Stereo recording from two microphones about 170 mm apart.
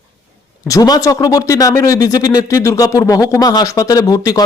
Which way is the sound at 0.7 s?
20° left (ahead or behind).